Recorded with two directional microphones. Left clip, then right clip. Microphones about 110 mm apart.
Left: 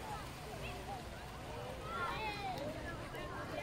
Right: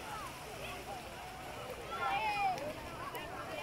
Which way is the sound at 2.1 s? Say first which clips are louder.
Right 7 dB; 20° left (ahead or behind).